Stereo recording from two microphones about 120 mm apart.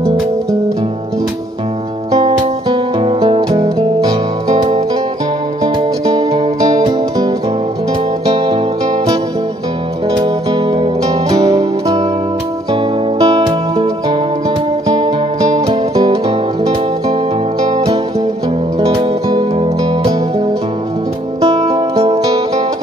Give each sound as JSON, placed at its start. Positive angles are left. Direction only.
{"t": 3.2, "sound": "music", "side_deg": -35}
{"t": 4.5, "sound": "music", "side_deg": -60}
{"t": 5.6, "sound": "music", "side_deg": -35}
{"t": 10.1, "sound": "music", "side_deg": -35}
{"t": 13.2, "sound": "music", "side_deg": -35}
{"t": 18.9, "sound": "music", "side_deg": -35}
{"t": 21.5, "sound": "music", "side_deg": -40}
{"t": 21.9, "sound": "music", "side_deg": -55}